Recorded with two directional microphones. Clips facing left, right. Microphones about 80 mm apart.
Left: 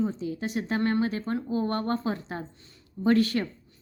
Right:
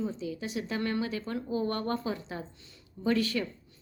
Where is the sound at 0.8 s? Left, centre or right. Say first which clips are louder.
Left 6 dB; left.